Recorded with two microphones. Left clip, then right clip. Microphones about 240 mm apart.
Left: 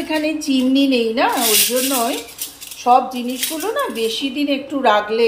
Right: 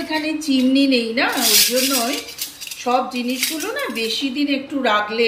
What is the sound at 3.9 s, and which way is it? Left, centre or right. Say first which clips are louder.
A woman's voice: left 1 dB; centre.